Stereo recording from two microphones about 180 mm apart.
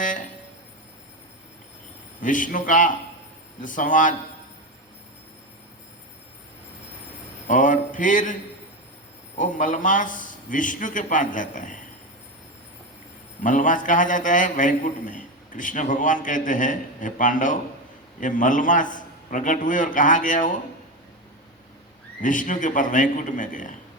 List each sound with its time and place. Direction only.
2.2 s a man's voice: 45° left (ahead or behind)
7.4 s speech: 45° left (ahead or behind)
9.4 s a man's voice: 45° left (ahead or behind)
13.4 s a man's voice: 45° left (ahead or behind)
22.2 s a man's voice: 45° left (ahead or behind)